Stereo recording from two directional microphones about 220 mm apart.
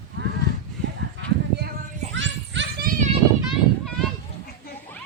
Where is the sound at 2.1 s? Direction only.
55° right (ahead or behind).